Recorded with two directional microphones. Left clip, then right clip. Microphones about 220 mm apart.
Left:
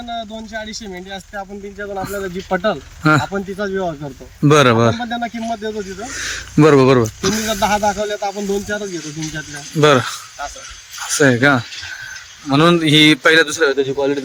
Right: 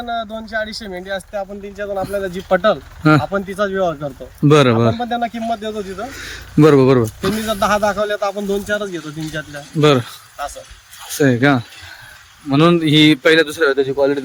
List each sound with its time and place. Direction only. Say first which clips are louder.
0.9 s speech: right 6 dB; 10° left (ahead or behind)
1.3 s speech: right 3 dB; 10° right (ahead or behind)